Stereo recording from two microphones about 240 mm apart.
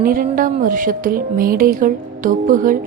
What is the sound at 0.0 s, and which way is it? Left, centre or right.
A woman's voice, right.